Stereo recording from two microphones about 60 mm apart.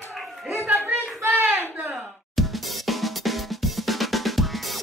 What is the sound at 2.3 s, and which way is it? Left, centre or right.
Drum, centre.